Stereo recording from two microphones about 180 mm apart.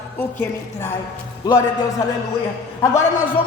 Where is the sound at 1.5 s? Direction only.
20° left (ahead or behind).